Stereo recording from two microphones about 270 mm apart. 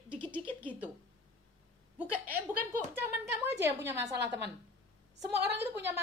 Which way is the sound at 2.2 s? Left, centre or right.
Centre.